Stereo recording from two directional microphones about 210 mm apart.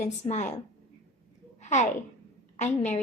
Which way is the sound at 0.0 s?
35° left (ahead or behind).